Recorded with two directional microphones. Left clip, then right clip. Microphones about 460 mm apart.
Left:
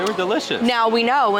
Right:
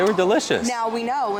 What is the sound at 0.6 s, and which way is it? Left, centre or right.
Speech, left.